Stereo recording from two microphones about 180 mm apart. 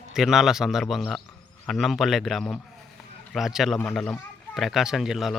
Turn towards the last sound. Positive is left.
turn(degrees=0)  # may be behind; listen again after turning